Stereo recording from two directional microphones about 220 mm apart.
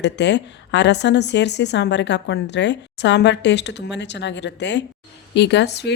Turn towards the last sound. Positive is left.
turn(degrees=50)  # may be behind; listen again after turning